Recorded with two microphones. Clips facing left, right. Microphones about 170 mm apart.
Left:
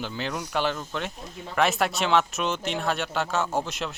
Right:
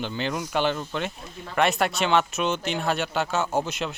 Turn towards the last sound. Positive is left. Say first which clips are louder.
# right 2 dB
turn(degrees=0)  # may be behind; listen again after turning